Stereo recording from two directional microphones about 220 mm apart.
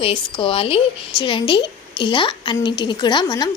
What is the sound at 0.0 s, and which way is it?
A woman's voice, 25° left (ahead or behind).